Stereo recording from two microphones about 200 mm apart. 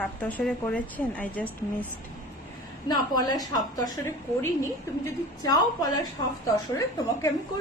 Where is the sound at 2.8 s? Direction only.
20° left (ahead or behind).